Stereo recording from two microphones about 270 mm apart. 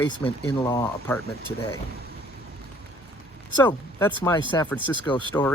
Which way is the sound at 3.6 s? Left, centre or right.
Centre.